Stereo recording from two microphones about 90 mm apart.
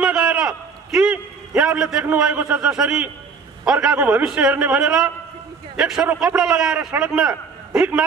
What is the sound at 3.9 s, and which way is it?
Speech, 20° right (ahead or behind).